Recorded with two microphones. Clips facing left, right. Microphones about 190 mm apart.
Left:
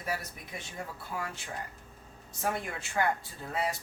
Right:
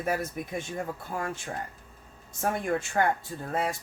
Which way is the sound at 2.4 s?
50° right (ahead or behind).